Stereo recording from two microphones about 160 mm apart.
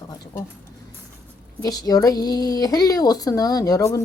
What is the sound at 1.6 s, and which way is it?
Speech, 25° left (ahead or behind).